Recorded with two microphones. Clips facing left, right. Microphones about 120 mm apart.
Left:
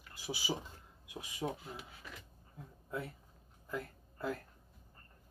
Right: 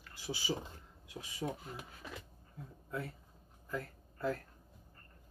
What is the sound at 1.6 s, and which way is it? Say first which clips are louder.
Speech: right 1 dB; 45° right (ahead or behind).